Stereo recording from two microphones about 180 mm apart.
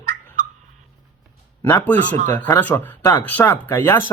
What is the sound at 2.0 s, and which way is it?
Speech, 45° right (ahead or behind).